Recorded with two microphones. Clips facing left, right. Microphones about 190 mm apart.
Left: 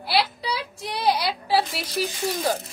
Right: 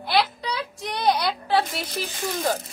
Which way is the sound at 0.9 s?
5° left (ahead or behind).